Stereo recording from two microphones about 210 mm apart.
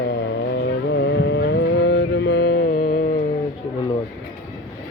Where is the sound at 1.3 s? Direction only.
55° left (ahead or behind).